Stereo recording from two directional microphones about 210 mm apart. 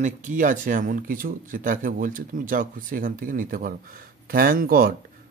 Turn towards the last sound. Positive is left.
turn(degrees=-45)  # may be behind; listen again after turning